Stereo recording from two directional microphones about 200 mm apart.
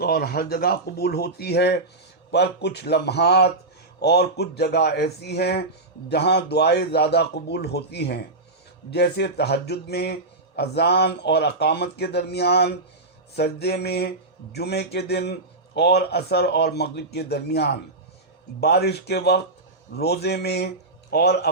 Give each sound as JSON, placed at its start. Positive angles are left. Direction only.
{"t": 0.0, "sound": "speech", "side_deg": 50}